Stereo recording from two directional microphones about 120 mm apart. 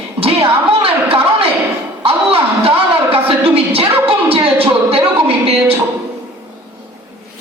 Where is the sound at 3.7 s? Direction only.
55° right (ahead or behind).